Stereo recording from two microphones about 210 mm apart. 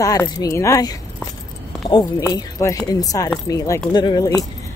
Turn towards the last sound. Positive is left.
turn(degrees=20)  # may be behind; listen again after turning